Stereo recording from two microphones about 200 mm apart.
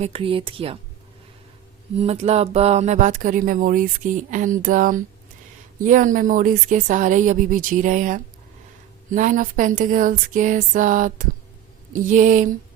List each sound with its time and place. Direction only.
0.0 s speech: 25° right (ahead or behind)
2.0 s speech: 30° right (ahead or behind)